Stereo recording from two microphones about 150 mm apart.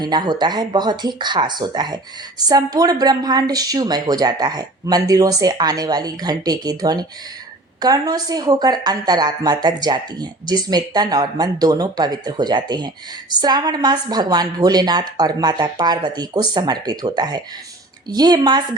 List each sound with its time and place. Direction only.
0.0 s a woman's voice: 30° right (ahead or behind)